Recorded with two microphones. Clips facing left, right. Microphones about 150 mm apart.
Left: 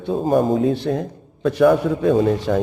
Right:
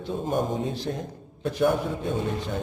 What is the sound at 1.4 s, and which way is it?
A man's voice, 90° left.